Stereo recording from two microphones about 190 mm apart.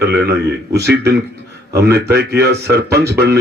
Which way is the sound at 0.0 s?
60° right (ahead or behind).